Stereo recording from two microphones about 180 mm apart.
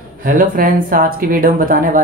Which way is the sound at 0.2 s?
50° right (ahead or behind).